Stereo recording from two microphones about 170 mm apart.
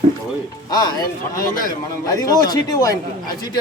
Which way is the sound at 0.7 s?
25° left (ahead or behind).